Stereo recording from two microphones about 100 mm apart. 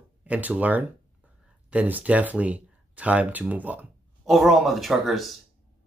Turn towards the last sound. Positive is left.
turn(degrees=0)  # may be behind; listen again after turning